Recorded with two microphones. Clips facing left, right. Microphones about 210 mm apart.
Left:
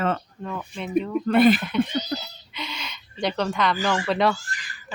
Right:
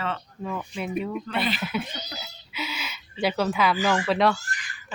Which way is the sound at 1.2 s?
50° left (ahead or behind).